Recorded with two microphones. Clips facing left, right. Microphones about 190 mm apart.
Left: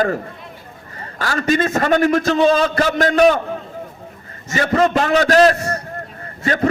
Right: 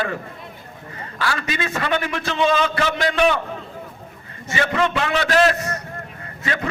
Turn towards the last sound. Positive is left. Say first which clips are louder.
# left 8 dB
turn(degrees=40)  # may be behind; listen again after turning